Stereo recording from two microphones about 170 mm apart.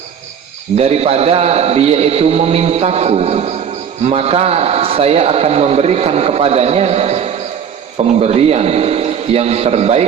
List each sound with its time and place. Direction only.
0.8 s a man's voice: 35° right (ahead or behind)